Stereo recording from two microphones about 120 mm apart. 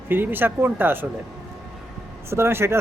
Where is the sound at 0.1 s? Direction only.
15° right (ahead or behind).